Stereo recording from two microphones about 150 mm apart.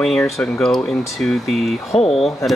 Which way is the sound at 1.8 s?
40° left (ahead or behind).